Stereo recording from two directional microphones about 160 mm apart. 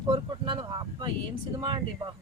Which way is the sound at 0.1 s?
30° right (ahead or behind).